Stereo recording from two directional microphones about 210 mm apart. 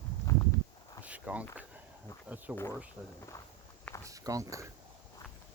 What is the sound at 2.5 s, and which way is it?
Speech, 5° right (ahead or behind).